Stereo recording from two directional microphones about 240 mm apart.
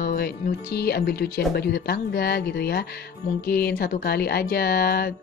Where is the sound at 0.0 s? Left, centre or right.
Left.